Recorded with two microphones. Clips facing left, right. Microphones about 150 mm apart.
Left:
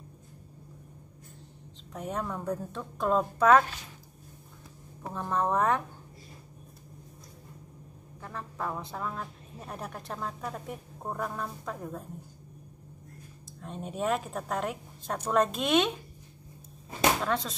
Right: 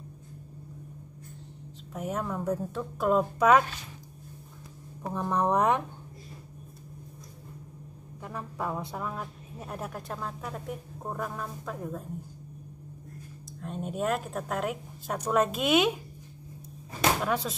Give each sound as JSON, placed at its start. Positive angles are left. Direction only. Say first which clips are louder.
{"t": 2.0, "sound": "speech", "louder": "right 2 dB", "side_deg": -5}
{"t": 5.1, "sound": "speech", "louder": "right 2 dB", "side_deg": -15}
{"t": 8.2, "sound": "speech", "louder": "right 2 dB", "side_deg": -10}
{"t": 13.6, "sound": "speech", "louder": "right 2 dB", "side_deg": 0}
{"t": 17.2, "sound": "speech", "louder": "right 1 dB", "side_deg": -10}